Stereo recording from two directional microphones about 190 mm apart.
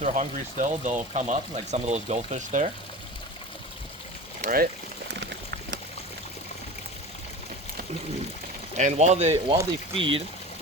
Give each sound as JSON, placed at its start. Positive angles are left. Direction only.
{"t": 0.0, "sound": "speech", "side_deg": -40}
{"t": 4.4, "sound": "speech", "side_deg": -50}
{"t": 5.1, "sound": "boiling", "side_deg": -65}
{"t": 8.7, "sound": "speech", "side_deg": -35}